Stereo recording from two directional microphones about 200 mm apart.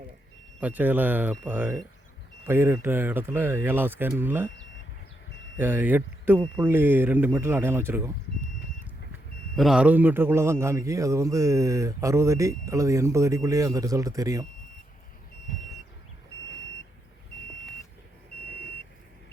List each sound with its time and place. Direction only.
0.6 s a man's voice: 10° right (ahead or behind)
5.5 s a man's voice: 10° right (ahead or behind)
9.6 s a man's voice: 5° right (ahead or behind)